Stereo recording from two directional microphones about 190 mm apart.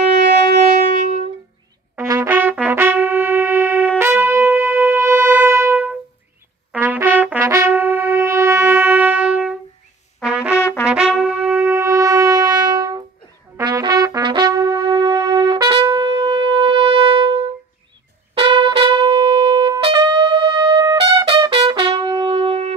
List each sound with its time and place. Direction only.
0.2 s shofar: 60° right (ahead or behind)
0.6 s music: 35° right (ahead or behind)
2.0 s trumpet: 10° right (ahead or behind)
4.0 s music: 10° right (ahead or behind)
6.7 s trumpet: 10° right (ahead or behind)
10.5 s music: 15° left (ahead or behind)
10.8 s brass instrument: 5° right (ahead or behind); by 17.4 s 25° right (ahead or behind)
18.3 s trumpet: 25° right (ahead or behind)